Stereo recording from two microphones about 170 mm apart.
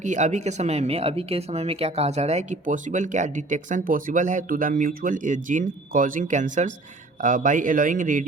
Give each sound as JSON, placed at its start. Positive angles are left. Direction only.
{"t": 0.0, "sound": "speech", "side_deg": -45}